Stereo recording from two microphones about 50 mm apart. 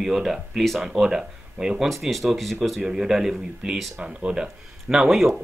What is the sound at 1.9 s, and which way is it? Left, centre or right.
Speech, centre.